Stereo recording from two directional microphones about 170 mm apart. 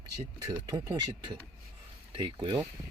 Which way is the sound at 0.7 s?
25° right (ahead or behind).